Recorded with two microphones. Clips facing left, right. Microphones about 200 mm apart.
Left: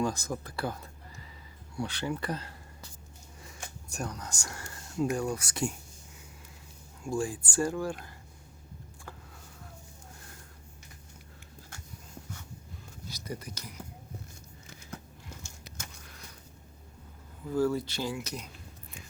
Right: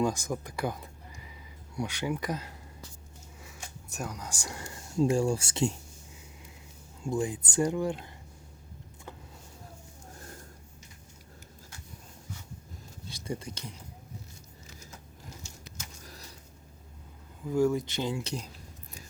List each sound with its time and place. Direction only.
0.0 s speech: 15° right (ahead or behind)
7.0 s speech: 20° right (ahead or behind)
13.1 s speech: 25° right (ahead or behind)
17.4 s speech: 15° right (ahead or behind)